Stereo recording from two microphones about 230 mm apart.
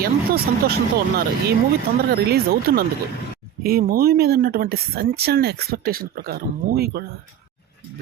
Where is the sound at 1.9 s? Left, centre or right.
Right.